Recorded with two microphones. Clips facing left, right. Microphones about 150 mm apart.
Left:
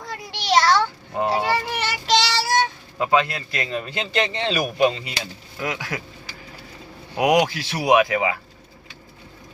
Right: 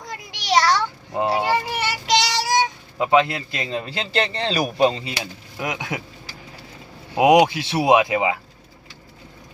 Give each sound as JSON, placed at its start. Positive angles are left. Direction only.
{"t": 0.1, "sound": "a sound", "side_deg": -10}
{"t": 1.1, "sound": "child singing", "side_deg": -15}
{"t": 5.2, "sound": "speech", "side_deg": -20}
{"t": 7.2, "sound": "speech", "side_deg": -25}